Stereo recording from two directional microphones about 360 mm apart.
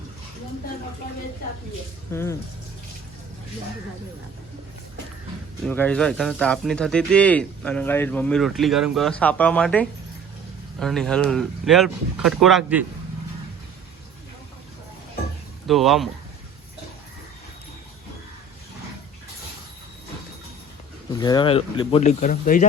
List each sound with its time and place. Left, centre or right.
5.6 s speech: centre
15.6 s speech: centre
21.1 s speech: centre